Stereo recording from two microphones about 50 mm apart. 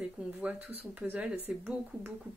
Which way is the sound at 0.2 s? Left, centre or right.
Right.